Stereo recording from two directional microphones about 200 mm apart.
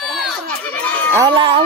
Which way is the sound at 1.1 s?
25° right (ahead or behind).